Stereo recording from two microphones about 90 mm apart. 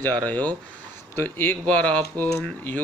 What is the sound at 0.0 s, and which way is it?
Speech, 15° left (ahead or behind).